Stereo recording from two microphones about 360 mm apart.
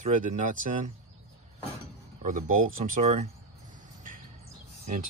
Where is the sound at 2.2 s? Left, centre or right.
Centre.